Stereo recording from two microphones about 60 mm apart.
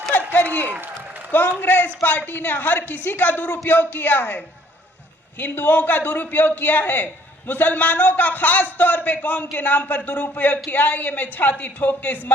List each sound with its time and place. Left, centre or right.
0.3 s a sound: left
0.7 s a man's voice: right
1.3 s a man's voice: left